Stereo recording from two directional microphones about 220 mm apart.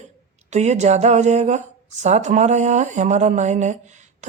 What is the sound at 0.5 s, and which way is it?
Speech, 30° right (ahead or behind).